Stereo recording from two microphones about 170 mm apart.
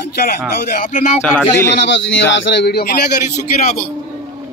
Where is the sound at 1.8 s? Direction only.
90° left; by 3.0 s 70° left (ahead or behind).